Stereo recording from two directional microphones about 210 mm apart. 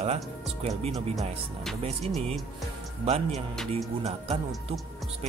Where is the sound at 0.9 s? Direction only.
Centre (ahead or behind).